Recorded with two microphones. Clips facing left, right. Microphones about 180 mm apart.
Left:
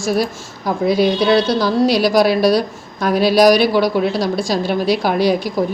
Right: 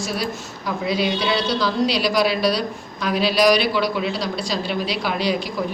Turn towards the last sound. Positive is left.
turn(degrees=45)  # may be behind; listen again after turning